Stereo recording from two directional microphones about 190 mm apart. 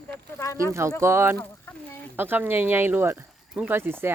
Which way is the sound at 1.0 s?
15° right (ahead or behind).